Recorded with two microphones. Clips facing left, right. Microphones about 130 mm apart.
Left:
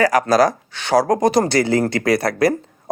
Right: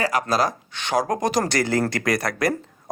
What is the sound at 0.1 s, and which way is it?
Speech, 40° left (ahead or behind).